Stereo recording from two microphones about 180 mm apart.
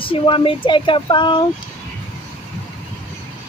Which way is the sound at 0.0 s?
30° left (ahead or behind).